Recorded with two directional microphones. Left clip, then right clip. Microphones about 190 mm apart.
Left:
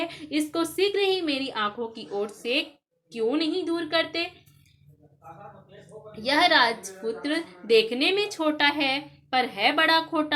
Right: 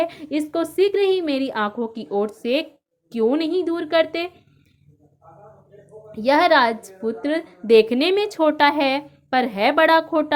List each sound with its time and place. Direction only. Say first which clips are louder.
0.0 s a woman's voice: right 5 dB; 45° right (ahead or behind)
6.1 s a woman's voice: right 5 dB; 45° right (ahead or behind)